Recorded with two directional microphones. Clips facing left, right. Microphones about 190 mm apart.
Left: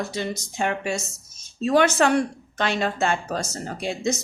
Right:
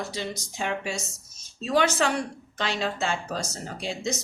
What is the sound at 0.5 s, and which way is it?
A woman's voice, 55° left (ahead or behind).